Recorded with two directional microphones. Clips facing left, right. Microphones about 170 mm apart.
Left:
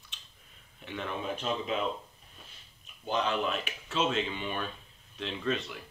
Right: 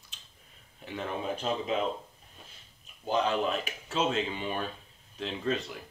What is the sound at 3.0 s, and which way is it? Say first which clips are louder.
Speech: right 2 dB; 35° right (ahead or behind).